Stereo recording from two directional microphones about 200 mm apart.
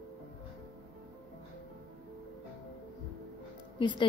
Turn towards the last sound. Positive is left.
turn(degrees=25)  # may be behind; listen again after turning